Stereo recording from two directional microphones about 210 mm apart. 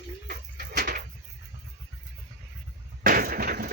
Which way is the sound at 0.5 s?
45° right (ahead or behind).